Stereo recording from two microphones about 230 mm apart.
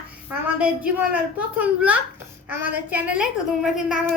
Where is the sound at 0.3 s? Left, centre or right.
Centre.